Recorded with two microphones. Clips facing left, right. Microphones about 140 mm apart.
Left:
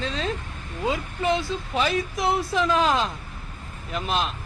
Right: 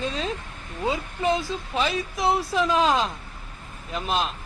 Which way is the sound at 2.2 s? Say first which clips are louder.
Right 2 dB; 30° right (ahead or behind).